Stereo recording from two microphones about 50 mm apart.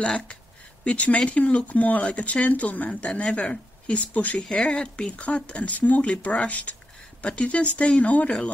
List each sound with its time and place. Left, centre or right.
0.0 s speech: left
3.1 s speech: centre; by 4.5 s left
4.5 s speech: centre